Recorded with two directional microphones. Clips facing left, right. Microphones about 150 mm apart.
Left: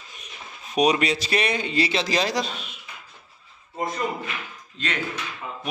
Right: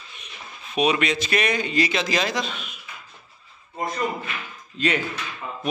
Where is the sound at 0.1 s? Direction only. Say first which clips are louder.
Even; 40° left (ahead or behind).